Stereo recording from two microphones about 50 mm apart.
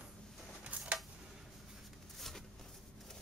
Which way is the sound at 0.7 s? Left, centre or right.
Right.